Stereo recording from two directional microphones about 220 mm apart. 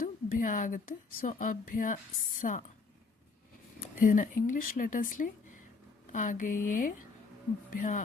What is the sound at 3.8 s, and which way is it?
Speech, 40° left (ahead or behind).